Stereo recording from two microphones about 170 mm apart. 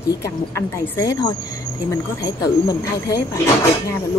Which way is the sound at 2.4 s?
20° left (ahead or behind).